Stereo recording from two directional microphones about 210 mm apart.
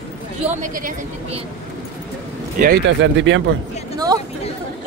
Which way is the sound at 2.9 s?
60° right (ahead or behind).